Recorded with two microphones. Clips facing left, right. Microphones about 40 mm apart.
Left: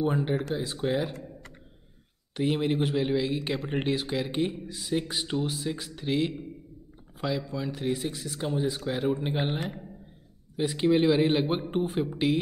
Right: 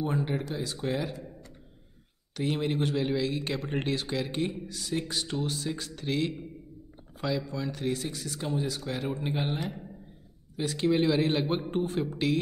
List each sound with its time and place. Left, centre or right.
0.0 s speech: centre
2.3 s speech: centre
9.5 s speech: left
10.5 s speech: centre